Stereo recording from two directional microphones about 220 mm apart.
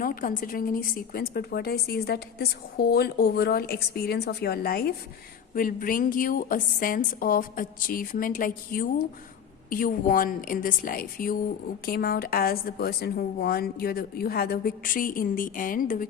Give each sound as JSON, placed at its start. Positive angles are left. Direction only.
{"t": 0.0, "sound": "a woman's voice", "side_deg": 40}